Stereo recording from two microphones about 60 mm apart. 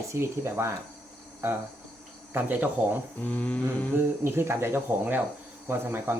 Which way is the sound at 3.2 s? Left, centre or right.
Left.